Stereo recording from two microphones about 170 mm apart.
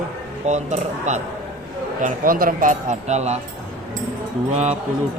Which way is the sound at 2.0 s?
55° right (ahead or behind).